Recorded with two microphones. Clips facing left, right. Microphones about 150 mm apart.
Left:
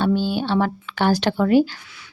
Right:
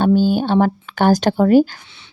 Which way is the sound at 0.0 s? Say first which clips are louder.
Right 6 dB; 45° right (ahead or behind).